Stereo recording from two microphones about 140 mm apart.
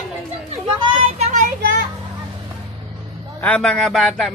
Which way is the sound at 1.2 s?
65° right (ahead or behind).